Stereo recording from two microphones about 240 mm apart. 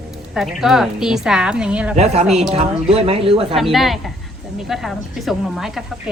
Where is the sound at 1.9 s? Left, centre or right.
Right.